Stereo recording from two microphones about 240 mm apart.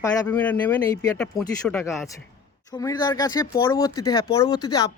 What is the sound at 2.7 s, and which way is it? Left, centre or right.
Speech, centre.